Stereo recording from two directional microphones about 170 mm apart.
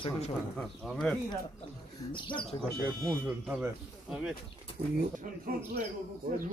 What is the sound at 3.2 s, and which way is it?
Speech, 5° right (ahead or behind).